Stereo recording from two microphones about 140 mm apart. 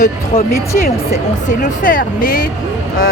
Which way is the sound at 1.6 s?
75° left (ahead or behind).